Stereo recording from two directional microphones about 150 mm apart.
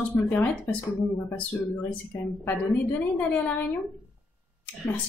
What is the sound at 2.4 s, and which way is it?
A woman's voice, 10° left (ahead or behind).